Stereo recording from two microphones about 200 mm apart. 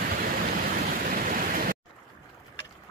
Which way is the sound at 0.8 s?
45° right (ahead or behind).